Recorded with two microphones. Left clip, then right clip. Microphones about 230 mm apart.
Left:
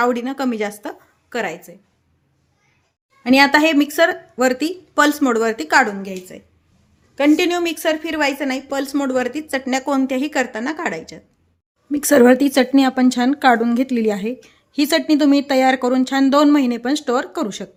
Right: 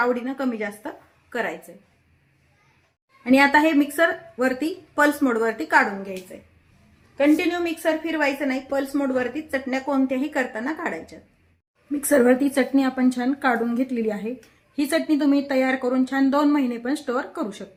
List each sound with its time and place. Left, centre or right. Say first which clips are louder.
0.0 s a woman's voice: left 4 dB; left
3.2 s speech: left 4 dB; left
7.2 s speech: left 4 dB; left